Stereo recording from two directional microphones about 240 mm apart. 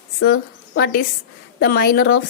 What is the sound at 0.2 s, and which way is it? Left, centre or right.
A woman's voice, left.